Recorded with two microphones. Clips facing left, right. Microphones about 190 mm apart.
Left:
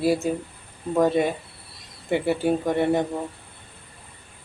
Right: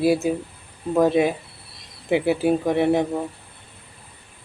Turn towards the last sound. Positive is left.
turn(degrees=0)  # may be behind; listen again after turning